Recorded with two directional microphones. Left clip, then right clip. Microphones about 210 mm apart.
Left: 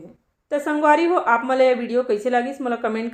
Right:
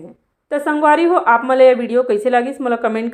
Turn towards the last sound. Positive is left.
turn(degrees=-20)  # may be behind; listen again after turning